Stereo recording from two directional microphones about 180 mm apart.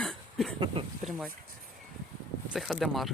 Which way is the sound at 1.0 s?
Centre (ahead or behind).